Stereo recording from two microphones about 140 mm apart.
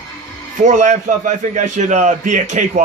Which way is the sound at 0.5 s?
60° right (ahead or behind).